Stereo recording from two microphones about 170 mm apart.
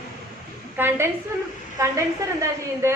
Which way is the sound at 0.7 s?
10° right (ahead or behind).